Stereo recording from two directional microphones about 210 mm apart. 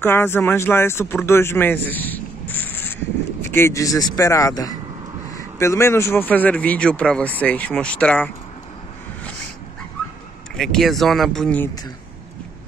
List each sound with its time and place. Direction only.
0.0 s speech: 10° left (ahead or behind)
10.5 s speech: centre (ahead or behind)